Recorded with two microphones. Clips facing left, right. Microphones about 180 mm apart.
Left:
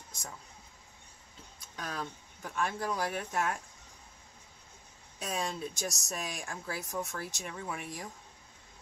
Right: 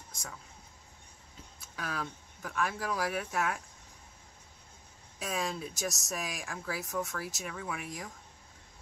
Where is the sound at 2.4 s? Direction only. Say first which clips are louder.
Even; 30° left (ahead or behind).